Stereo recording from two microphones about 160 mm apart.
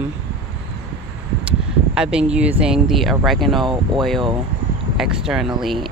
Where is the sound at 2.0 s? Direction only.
5° right (ahead or behind).